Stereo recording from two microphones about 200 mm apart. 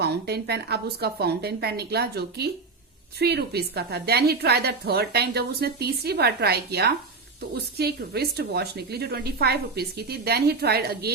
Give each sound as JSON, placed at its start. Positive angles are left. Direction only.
{"t": 0.0, "sound": "a woman's voice", "side_deg": -55}